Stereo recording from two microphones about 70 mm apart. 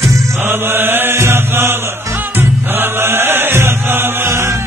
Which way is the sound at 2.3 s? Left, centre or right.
Right.